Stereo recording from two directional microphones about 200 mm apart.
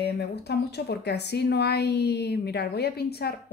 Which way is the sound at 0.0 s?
55° left (ahead or behind).